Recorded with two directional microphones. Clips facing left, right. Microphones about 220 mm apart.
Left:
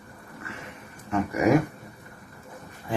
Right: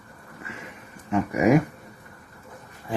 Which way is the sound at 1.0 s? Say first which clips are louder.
Right 2 dB; 20° right (ahead or behind).